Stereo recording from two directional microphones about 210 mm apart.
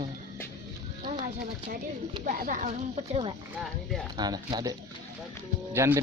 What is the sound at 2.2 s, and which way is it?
Speech, 40° right (ahead or behind).